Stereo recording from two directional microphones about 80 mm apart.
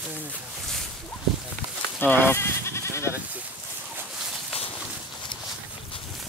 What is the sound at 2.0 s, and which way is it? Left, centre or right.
Speech, left.